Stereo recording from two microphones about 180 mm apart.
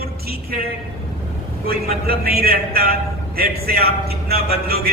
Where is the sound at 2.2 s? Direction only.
60° right (ahead or behind).